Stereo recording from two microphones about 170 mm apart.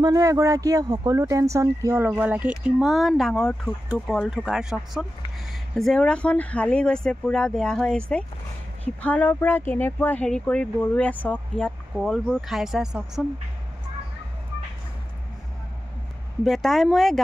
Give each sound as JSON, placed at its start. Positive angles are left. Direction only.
{"t": 0.0, "sound": "speech", "side_deg": -20}
{"t": 16.4, "sound": "speech", "side_deg": 0}